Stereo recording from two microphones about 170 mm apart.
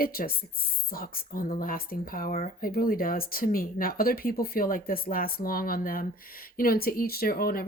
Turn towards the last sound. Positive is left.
turn(degrees=60)  # may be behind; listen again after turning